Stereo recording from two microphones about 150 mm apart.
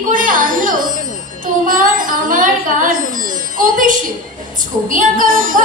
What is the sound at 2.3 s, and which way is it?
Singing, 65° right (ahead or behind).